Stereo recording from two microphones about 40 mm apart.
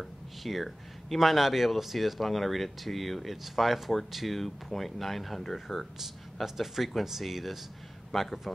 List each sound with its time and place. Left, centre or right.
0.0 s speech: centre
6.4 s speech: centre